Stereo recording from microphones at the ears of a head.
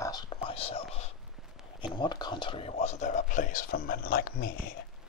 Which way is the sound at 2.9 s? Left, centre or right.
Left.